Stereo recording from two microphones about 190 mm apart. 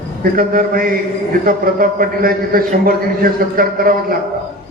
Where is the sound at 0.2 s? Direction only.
50° right (ahead or behind).